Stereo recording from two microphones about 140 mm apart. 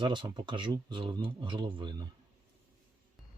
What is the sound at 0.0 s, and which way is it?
Speech, 30° right (ahead or behind).